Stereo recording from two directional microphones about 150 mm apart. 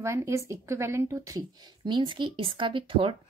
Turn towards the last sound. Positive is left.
turn(degrees=-35)  # may be behind; listen again after turning